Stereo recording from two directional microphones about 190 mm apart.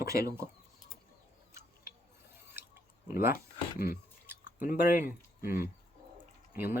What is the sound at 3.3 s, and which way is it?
Speech, 50° left (ahead or behind).